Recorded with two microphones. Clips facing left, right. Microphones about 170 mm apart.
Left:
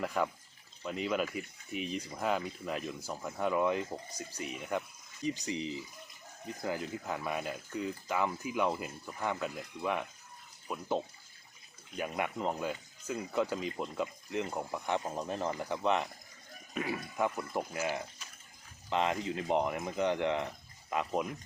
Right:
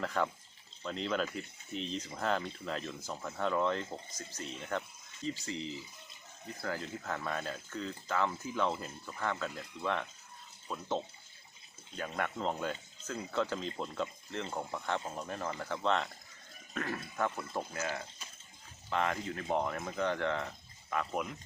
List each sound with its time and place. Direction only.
0.0 s speech: 10° left (ahead or behind)